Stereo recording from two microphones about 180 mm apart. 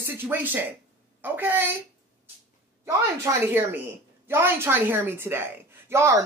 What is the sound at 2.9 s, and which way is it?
A woman's voice, 15° right (ahead or behind).